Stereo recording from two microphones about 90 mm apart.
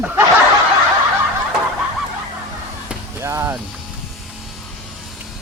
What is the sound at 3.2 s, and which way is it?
Speech, 30° right (ahead or behind).